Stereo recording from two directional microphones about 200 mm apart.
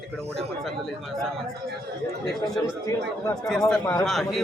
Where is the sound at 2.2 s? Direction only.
Centre (ahead or behind).